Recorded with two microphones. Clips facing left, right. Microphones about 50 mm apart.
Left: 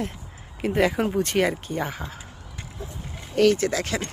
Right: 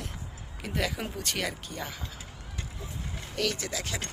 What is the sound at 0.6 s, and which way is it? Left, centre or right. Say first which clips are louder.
Speech: left 10 dB; left.